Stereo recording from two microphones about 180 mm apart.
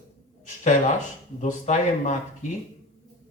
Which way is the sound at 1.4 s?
40° left (ahead or behind).